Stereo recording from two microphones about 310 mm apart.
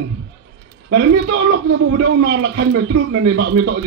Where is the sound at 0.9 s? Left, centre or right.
Right.